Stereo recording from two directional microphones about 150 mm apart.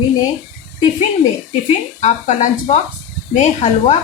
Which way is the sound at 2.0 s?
50° left (ahead or behind).